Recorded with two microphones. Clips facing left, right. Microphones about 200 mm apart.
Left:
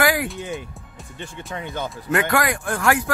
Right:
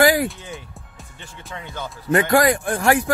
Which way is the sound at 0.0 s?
35° right (ahead or behind).